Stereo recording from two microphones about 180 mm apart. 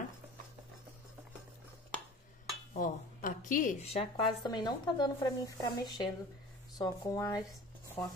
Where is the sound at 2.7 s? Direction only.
50° left (ahead or behind).